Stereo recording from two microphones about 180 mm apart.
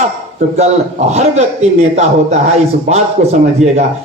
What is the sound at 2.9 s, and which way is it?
Speech, 40° right (ahead or behind).